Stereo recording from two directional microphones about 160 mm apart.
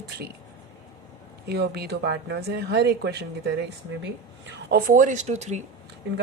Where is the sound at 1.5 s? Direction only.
90° right.